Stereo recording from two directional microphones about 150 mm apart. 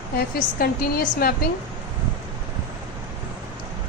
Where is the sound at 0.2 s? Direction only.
85° left.